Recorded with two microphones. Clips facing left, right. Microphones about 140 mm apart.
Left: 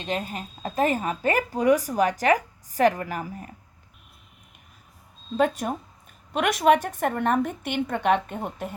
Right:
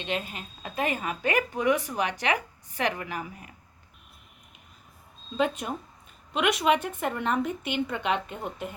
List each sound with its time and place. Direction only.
0.0 s a woman's voice: 40° left (ahead or behind)
5.4 s a woman's voice: 45° left (ahead or behind)